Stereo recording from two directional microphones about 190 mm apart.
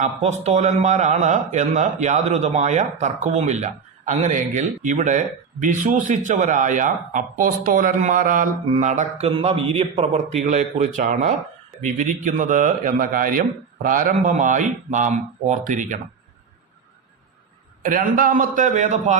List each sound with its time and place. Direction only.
0.0 s a man's voice: 35° right (ahead or behind)
17.8 s a man's voice: 45° right (ahead or behind)